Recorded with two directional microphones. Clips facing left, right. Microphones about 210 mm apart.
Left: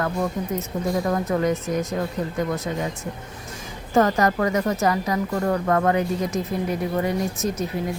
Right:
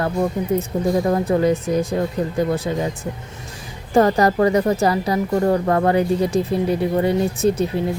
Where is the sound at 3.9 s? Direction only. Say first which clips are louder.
Right 4 dB; 30° right (ahead or behind).